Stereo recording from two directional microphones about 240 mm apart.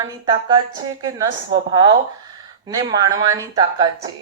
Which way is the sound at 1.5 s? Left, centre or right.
Right.